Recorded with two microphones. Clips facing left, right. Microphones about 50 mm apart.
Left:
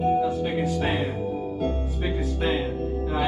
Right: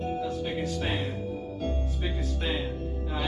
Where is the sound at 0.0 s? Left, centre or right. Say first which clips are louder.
Left 8 dB; centre.